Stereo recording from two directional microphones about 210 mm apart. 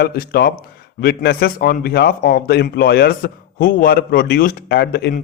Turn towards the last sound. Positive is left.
turn(degrees=50)  # may be behind; listen again after turning